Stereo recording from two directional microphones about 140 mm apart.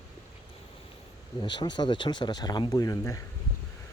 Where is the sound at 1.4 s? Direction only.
30° left (ahead or behind).